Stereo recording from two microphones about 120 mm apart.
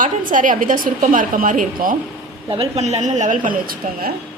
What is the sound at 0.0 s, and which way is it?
A woman's voice, 90° right.